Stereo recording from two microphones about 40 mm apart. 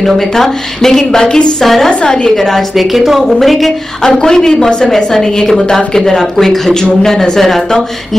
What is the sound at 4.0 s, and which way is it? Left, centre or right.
Speech, centre.